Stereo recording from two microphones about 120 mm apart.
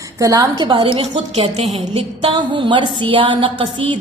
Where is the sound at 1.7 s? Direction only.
55° right (ahead or behind).